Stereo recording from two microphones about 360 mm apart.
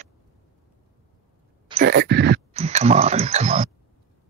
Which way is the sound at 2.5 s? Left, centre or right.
Centre.